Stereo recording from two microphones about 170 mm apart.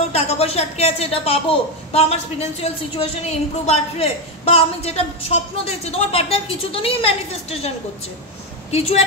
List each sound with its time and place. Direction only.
0.1 s a woman's voice: 35° left (ahead or behind)
8.7 s a woman's voice: 40° left (ahead or behind)